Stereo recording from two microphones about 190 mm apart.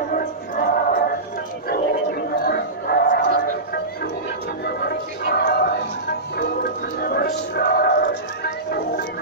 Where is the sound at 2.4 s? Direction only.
55° left (ahead or behind).